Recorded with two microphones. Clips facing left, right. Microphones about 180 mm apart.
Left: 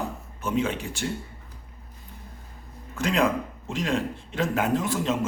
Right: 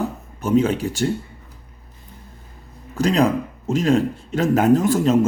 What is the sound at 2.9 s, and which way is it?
Speech, 35° right (ahead or behind).